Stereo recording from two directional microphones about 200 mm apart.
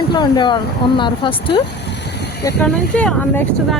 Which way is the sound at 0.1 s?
20° left (ahead or behind).